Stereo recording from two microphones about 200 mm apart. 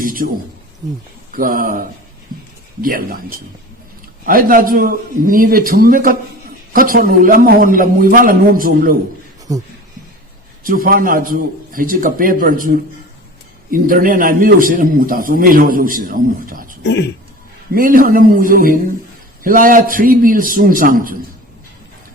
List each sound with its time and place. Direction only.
0.0 s a man's voice: 45° right (ahead or behind)
1.4 s a man's voice: 45° right (ahead or behind)
4.3 s a man's voice: 45° right (ahead or behind)
9.5 s speech: 15° right (ahead or behind)
10.6 s a man's voice: 45° right (ahead or behind)
16.8 s speech: 60° left (ahead or behind)
17.7 s a man's voice: 45° right (ahead or behind)